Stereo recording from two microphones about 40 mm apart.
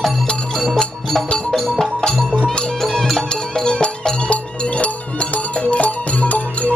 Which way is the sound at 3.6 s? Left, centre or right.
Left.